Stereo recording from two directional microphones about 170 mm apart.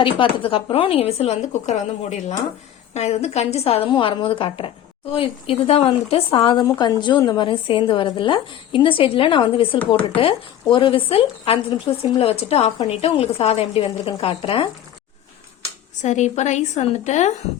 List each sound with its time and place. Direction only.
0.0 s a woman's voice: 30° left (ahead or behind)
16.0 s a woman's voice: 45° left (ahead or behind)